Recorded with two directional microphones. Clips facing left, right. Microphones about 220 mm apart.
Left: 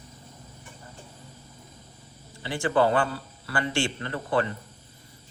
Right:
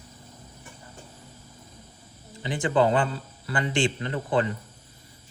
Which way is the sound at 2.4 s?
20° right (ahead or behind).